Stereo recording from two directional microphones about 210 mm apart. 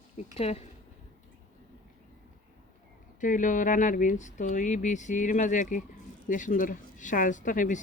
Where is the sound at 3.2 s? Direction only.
40° left (ahead or behind).